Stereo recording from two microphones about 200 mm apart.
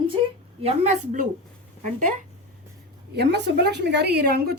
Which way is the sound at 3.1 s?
55° right (ahead or behind).